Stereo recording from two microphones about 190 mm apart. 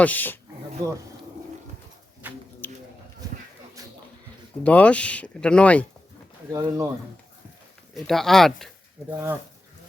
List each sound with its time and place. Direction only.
0.0 s speech: 10° left (ahead or behind)
2.2 s speech: 10° right (ahead or behind)
2.6 s a sound: 10° left (ahead or behind)
4.6 s speech: 5° left (ahead or behind)
6.5 s speech: 20° right (ahead or behind)
7.9 s speech: centre (ahead or behind)
9.1 s speech: 10° right (ahead or behind)